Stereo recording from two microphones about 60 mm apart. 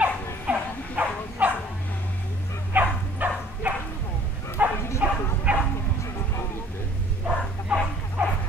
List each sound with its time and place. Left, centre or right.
0.0 s dog: right
2.7 s dog: right
4.6 s bow-wow: right
7.2 s a sound: centre